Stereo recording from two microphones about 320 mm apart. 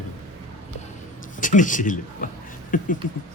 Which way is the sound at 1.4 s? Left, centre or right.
Left.